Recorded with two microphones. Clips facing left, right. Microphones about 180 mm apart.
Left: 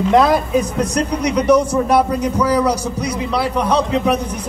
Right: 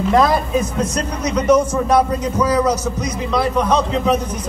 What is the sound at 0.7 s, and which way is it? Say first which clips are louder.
A man's voice: left 3 dB; 15° left (ahead or behind).